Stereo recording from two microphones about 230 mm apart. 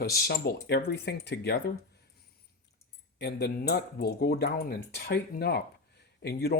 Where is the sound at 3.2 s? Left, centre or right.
Left.